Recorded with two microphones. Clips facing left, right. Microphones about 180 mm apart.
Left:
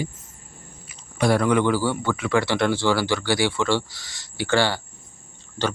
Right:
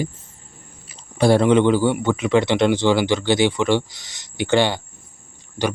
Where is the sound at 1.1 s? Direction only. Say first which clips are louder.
Right 5 dB; 30° right (ahead or behind).